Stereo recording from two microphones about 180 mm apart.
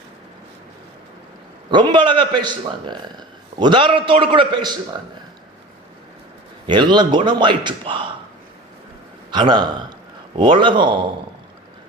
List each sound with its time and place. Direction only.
1.7 s a man's voice: 25° right (ahead or behind)
6.7 s a man's voice: 25° right (ahead or behind)
9.3 s a man's voice: 25° right (ahead or behind)